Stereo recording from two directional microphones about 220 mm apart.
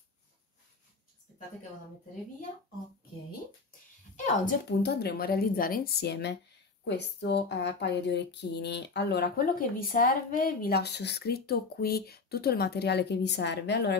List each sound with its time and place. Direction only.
4.5 s speech: 50° left (ahead or behind)